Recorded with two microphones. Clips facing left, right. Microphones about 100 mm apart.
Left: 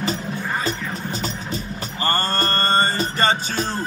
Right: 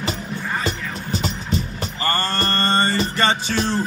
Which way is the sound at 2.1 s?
45° left (ahead or behind).